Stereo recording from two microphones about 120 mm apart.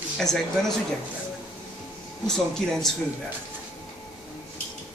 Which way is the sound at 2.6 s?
5° left (ahead or behind).